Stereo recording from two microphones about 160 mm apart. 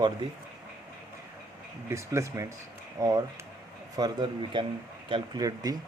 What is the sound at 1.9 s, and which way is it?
A man's voice, 20° right (ahead or behind).